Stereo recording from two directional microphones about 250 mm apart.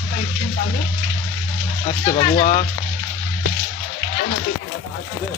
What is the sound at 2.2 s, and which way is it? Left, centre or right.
Speech, left.